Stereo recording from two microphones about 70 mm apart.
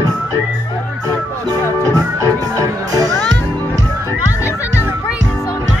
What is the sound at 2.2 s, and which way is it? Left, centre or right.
Speech, right.